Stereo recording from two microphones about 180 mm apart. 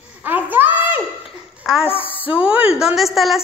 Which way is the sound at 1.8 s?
30° left (ahead or behind).